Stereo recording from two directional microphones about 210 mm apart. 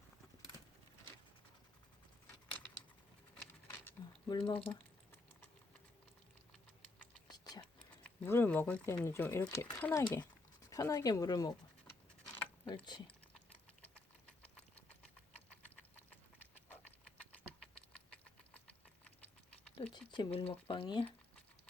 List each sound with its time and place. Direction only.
3.3 s patter: 10° left (ahead or behind)
4.3 s speech: 20° left (ahead or behind)
4.5 s typing: 10° left (ahead or behind)
7.3 s a sound: 20° left (ahead or behind)
8.2 s speech: 10° left (ahead or behind)
12.6 s speech: 25° left (ahead or behind)
19.9 s speech: 20° left (ahead or behind)